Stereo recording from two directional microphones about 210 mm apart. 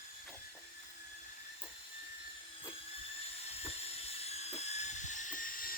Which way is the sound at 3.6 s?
30° left (ahead or behind).